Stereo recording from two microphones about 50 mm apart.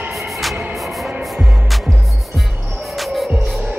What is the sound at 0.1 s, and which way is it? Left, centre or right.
Music, centre.